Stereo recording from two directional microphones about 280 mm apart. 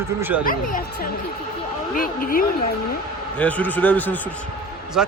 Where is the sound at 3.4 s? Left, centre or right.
Centre.